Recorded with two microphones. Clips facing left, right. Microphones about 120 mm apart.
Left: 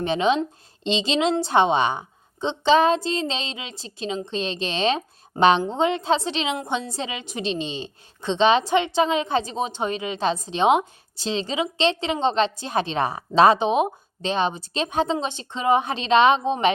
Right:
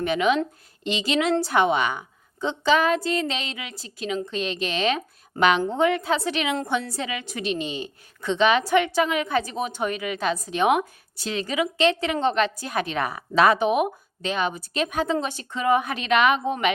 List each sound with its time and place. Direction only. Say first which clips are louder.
0.0 s a woman's voice: left 1 dB; 30° left (ahead or behind)